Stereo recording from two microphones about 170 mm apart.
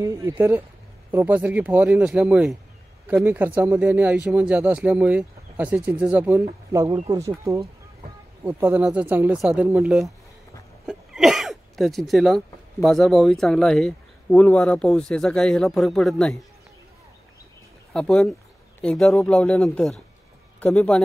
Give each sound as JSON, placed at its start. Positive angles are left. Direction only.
{"t": 0.0, "sound": "speech", "side_deg": -15}
{"t": 10.9, "sound": "a sound", "side_deg": 0}
{"t": 12.8, "sound": "speech", "side_deg": 0}
{"t": 17.9, "sound": "speech", "side_deg": 5}